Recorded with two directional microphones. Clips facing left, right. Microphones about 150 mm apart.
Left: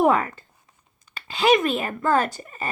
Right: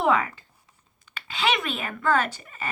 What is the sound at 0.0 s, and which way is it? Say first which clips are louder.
Speech: left 4 dB; 45° left (ahead or behind).